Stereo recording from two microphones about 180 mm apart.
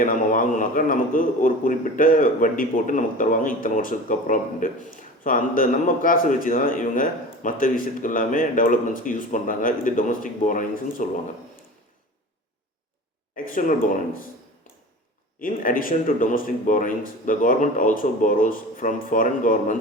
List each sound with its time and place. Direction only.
0.0 s a man's voice: 45° left (ahead or behind)
13.3 s speech: 45° left (ahead or behind)
15.4 s a man's voice: 50° left (ahead or behind)